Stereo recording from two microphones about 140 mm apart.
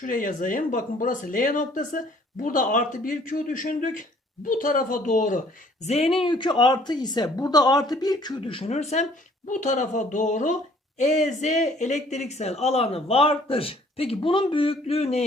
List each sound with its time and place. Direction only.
0.0 s speech: 70° left (ahead or behind)
5.8 s speech: 45° left (ahead or behind)
9.5 s speech: 60° left (ahead or behind)